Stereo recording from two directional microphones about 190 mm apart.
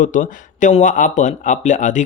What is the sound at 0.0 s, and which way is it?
Speech, 45° left (ahead or behind).